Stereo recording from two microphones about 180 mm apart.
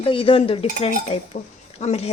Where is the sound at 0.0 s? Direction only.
30° left (ahead or behind).